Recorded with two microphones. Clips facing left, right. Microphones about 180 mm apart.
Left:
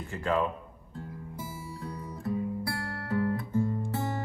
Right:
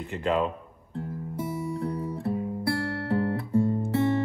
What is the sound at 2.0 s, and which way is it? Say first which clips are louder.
Music: right 4 dB; 30° right (ahead or behind).